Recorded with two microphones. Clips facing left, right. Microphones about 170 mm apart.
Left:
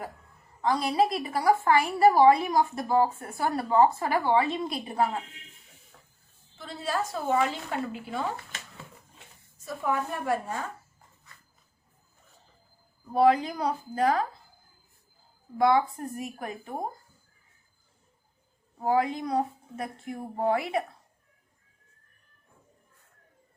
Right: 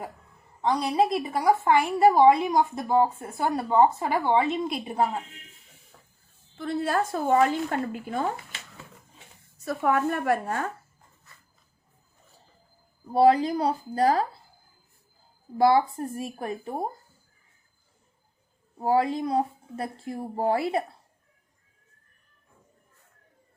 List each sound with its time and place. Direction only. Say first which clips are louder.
0.6 s a woman's voice: right 1 dB; 20° right (ahead or behind)
6.6 s a woman's voice: right 5 dB; 55° right (ahead or behind)
9.6 s a woman's voice: right 5 dB; 65° right (ahead or behind)
13.1 s a woman's voice: right 3 dB; 30° right (ahead or behind)
15.5 s a woman's voice: right 3 dB; 30° right (ahead or behind)
18.8 s a woman's voice: right 2 dB; 30° right (ahead or behind)